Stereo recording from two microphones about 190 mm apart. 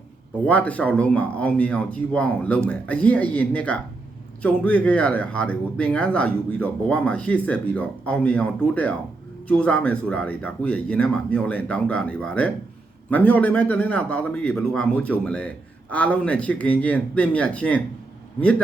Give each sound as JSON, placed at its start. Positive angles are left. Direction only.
{"t": 0.4, "sound": "a man's voice", "side_deg": 5}